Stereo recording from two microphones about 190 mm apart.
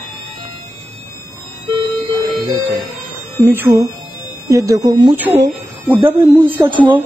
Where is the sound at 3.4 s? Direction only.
10° right (ahead or behind).